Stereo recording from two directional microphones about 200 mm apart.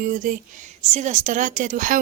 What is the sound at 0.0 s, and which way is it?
A woman's voice, 45° right (ahead or behind).